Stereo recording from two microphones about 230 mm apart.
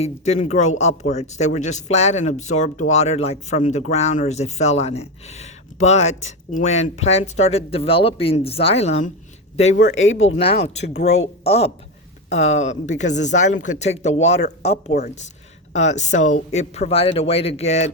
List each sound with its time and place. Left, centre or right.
0.0 s speech: left
9.7 s speech: left
10.2 s speech: left